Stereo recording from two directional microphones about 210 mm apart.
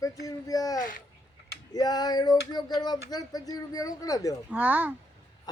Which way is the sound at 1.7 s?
20° left (ahead or behind).